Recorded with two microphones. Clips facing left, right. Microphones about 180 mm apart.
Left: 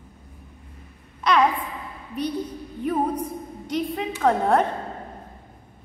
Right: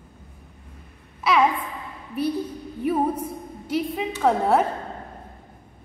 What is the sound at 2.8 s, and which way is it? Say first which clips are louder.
Music: right 2 dB; 10° right (ahead or behind).